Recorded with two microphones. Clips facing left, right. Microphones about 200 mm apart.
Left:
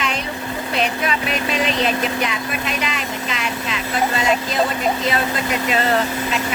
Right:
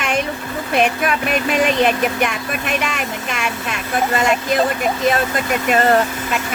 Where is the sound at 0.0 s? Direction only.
50° right (ahead or behind).